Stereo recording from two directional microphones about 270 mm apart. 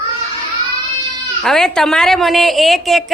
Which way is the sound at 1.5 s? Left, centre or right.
Centre.